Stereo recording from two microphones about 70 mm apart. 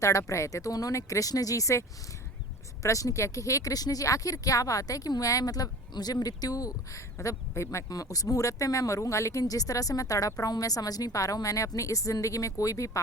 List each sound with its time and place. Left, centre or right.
0.0 s speech: left
2.8 s speech: left
7.9 s speech: left